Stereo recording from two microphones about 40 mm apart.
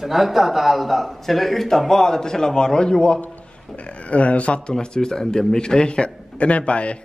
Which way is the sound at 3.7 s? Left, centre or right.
Left.